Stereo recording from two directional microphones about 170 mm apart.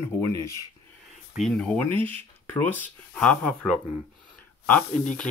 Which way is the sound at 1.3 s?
Centre (ahead or behind).